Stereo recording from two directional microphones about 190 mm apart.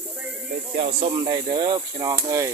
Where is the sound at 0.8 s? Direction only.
30° right (ahead or behind).